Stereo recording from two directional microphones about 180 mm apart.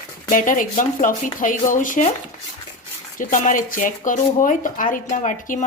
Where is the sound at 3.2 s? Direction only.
45° left (ahead or behind).